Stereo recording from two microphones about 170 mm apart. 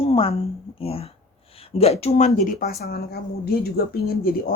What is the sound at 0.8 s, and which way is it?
Speech, 35° left (ahead or behind).